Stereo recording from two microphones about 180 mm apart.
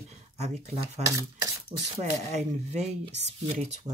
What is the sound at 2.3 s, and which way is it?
Speech, 40° right (ahead or behind).